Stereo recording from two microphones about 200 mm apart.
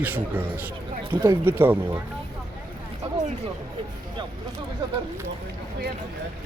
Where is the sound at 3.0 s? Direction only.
35° right (ahead or behind).